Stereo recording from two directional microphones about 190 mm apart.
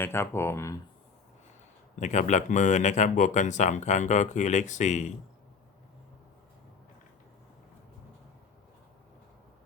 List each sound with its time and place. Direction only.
0.0 s speech: 10° left (ahead or behind)
2.0 s speech: 40° left (ahead or behind)